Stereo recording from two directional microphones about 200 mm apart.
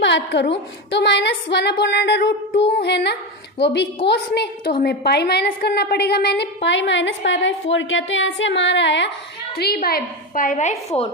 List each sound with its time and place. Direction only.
0.0 s a woman's voice: 65° left (ahead or behind)
9.6 s a woman's voice: 50° left (ahead or behind); by 11.1 s 30° left (ahead or behind)